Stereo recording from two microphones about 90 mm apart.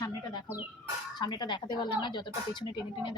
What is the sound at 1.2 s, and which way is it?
Speech, 55° left (ahead or behind).